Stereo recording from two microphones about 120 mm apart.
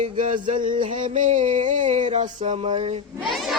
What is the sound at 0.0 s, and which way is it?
Music, 90° right.